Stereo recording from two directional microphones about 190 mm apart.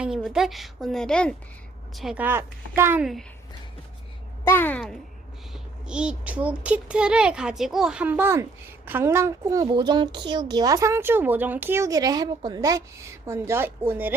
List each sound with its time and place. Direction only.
0.0 s a woman's voice: centre (ahead or behind)
4.4 s a child's voice: 10° left (ahead or behind)
5.9 s a child's voice: 5° right (ahead or behind)